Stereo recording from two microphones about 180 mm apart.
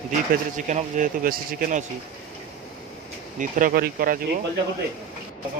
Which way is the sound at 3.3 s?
50° right (ahead or behind).